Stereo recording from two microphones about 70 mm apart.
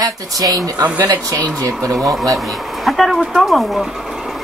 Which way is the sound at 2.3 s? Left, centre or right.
Centre.